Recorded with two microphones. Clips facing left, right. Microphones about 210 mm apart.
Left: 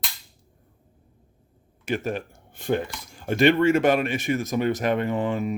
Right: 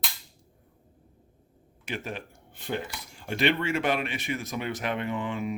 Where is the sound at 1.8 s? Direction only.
45° left (ahead or behind).